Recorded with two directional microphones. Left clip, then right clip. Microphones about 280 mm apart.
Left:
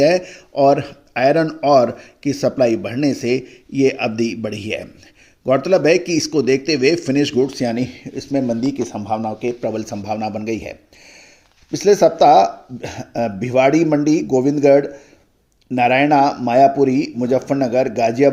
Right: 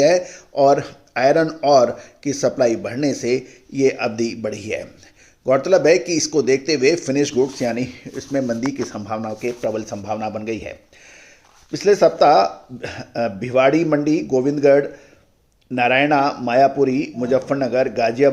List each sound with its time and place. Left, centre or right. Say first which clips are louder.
0.3 s speech: left 1 dB; left